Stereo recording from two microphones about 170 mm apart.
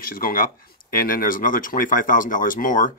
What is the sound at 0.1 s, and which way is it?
Speech, 55° left (ahead or behind).